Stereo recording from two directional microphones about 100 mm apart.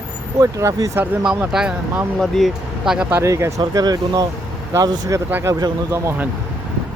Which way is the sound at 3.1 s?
30° right (ahead or behind).